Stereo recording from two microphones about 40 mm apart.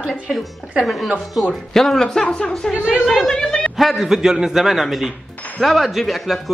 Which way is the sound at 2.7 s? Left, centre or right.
Centre.